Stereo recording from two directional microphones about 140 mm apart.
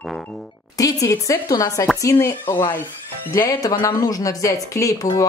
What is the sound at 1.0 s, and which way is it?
Speech, 25° left (ahead or behind).